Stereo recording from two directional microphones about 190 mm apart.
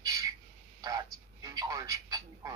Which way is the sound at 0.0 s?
20° right (ahead or behind).